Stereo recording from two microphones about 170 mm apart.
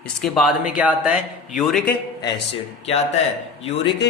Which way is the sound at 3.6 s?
35° left (ahead or behind).